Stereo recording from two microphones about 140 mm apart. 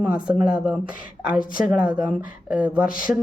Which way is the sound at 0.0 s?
10° right (ahead or behind).